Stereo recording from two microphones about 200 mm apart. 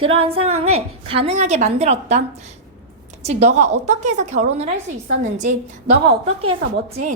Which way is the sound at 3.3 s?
35° right (ahead or behind).